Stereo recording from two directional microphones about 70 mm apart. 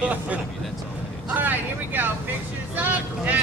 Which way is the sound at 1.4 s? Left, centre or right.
Right.